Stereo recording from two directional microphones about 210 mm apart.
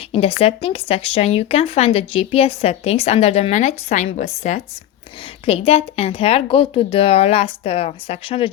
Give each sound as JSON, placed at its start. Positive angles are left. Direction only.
{"t": 0.1, "sound": "speech", "side_deg": 30}